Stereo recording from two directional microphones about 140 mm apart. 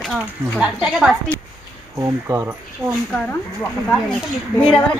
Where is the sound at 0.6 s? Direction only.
5° right (ahead or behind).